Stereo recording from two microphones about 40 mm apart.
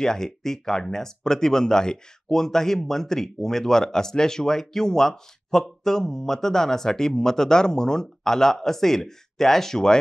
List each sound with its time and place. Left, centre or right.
0.0 s speech: centre